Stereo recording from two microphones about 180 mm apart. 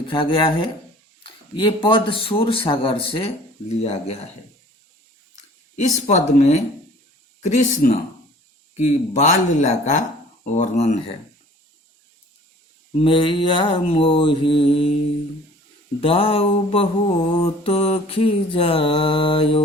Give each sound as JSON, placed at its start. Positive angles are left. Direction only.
{"t": 0.1, "sound": "mantra", "side_deg": 30}
{"t": 3.8, "sound": "a man's voice", "side_deg": 35}
{"t": 5.7, "sound": "a man's voice", "side_deg": 40}
{"t": 13.0, "sound": "mantra", "side_deg": 30}
{"t": 16.0, "sound": "a man's voice", "side_deg": 30}
{"t": 17.4, "sound": "mantra", "side_deg": 35}